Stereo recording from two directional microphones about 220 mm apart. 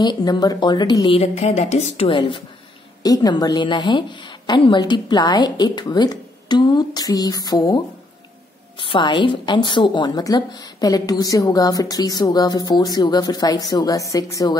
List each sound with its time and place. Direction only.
0.0 s a woman's voice: 20° left (ahead or behind)